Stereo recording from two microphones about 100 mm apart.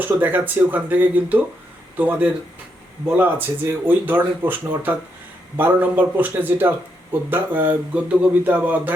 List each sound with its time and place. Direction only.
0.0 s speech: 20° right (ahead or behind)